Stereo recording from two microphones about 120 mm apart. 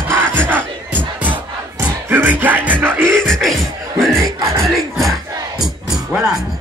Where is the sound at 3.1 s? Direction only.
5° left (ahead or behind).